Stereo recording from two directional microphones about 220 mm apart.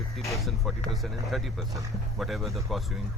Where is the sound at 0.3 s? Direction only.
Centre (ahead or behind).